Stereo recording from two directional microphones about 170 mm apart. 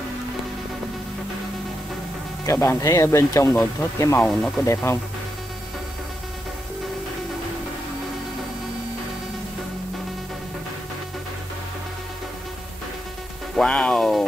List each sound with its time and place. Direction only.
2.4 s speech: 15° left (ahead or behind)
4.3 s speech: centre (ahead or behind)
4.6 s speech: 15° left (ahead or behind)
13.6 s speech: 5° left (ahead or behind)